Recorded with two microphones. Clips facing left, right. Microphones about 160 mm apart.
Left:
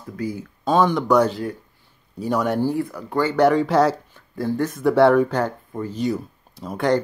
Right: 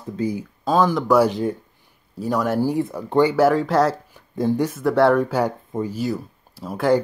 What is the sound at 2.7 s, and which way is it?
Speech, 20° right (ahead or behind).